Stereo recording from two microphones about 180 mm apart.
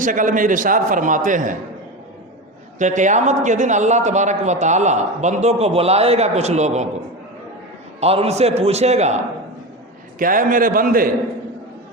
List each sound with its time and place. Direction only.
0.0 s a man's voice: 45° right (ahead or behind)
2.7 s a man's voice: 45° right (ahead or behind)
8.0 s a man's voice: 35° right (ahead or behind)
10.2 s a man's voice: 50° right (ahead or behind)